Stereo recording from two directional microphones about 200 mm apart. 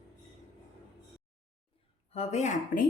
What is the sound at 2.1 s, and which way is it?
Speech, 35° left (ahead or behind).